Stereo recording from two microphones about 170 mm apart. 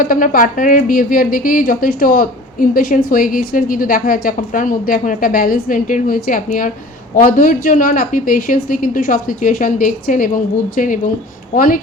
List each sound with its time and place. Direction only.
0.0 s a woman's voice: 55° left (ahead or behind)